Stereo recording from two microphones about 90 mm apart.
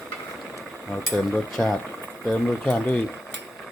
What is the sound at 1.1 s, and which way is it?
Speech, 5° left (ahead or behind).